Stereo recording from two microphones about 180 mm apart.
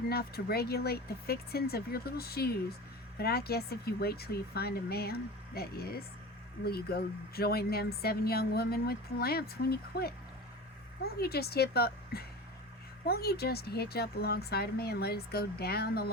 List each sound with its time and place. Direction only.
0.1 s a woman's voice: 60° left (ahead or behind)